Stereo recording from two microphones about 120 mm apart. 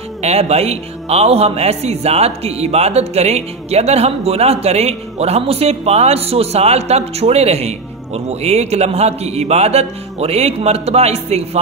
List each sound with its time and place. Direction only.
0.2 s a man's voice: 60° right (ahead or behind)